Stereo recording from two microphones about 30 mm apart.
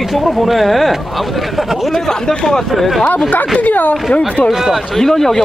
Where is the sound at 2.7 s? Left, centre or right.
Centre.